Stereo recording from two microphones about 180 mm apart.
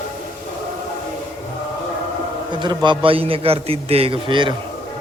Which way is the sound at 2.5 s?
25° right (ahead or behind).